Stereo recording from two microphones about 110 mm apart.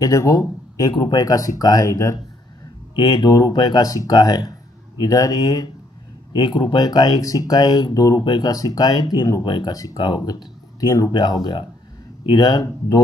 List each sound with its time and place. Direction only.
0.0 s speech: 30° left (ahead or behind)
3.0 s speech: 40° left (ahead or behind)